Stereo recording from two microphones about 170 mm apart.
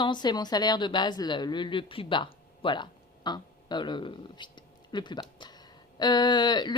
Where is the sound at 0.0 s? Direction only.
25° left (ahead or behind).